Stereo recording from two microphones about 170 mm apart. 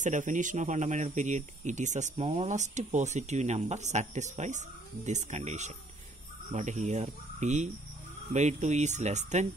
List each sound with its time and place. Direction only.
0.0 s speech: 50° right (ahead or behind)